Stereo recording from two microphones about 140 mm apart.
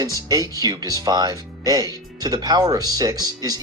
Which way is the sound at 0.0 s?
25° right (ahead or behind).